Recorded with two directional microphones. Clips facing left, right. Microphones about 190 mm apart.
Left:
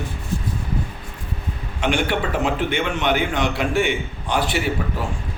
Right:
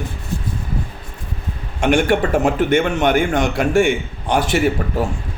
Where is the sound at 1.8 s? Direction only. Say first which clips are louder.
Right 6 dB; 45° right (ahead or behind).